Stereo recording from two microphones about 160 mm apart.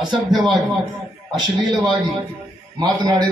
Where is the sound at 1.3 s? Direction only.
25° right (ahead or behind).